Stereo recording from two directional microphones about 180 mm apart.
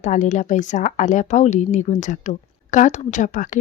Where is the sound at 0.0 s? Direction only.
40° left (ahead or behind).